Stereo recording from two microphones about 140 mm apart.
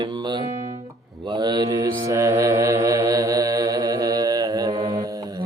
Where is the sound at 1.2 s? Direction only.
30° right (ahead or behind).